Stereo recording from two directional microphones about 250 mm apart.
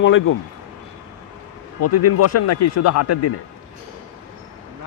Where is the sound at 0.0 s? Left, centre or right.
Left.